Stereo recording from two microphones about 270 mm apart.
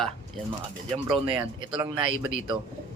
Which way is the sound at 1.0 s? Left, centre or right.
Right.